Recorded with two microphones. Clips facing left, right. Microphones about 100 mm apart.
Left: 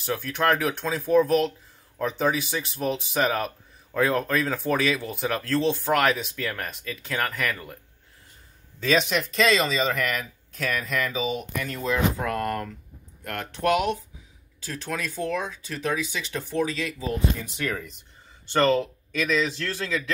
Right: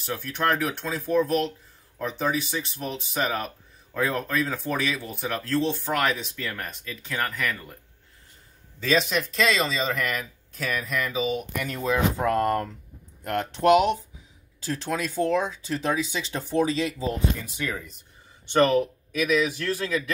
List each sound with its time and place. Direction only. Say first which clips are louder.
0.2 s speech: left 1 dB; centre (ahead or behind)
8.8 s speech: left 1 dB; centre (ahead or behind)
12.2 s speech: right 4 dB; 30° right (ahead or behind)
17.6 s speech: left 2 dB; 5° right (ahead or behind)
18.5 s speech: right 1 dB; 15° right (ahead or behind)